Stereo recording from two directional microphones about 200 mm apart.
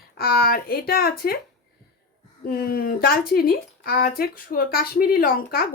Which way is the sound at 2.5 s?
50° left (ahead or behind).